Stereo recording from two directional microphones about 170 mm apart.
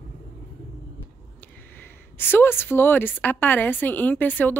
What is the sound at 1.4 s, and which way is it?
Speech, 10° left (ahead or behind).